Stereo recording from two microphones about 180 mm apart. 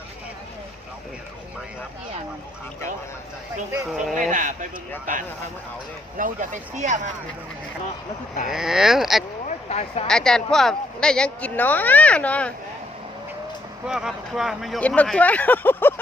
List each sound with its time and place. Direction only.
3.8 s speech: 5° right (ahead or behind)
4.1 s speech: 45° right (ahead or behind)
6.1 s speech: 45° right (ahead or behind)
8.4 s speech: 5° right (ahead or behind)
9.6 s speech: 35° left (ahead or behind)
10.1 s speech: 5° left (ahead or behind)
13.8 s speech: 5° right (ahead or behind); by 16.0 s 10° left (ahead or behind)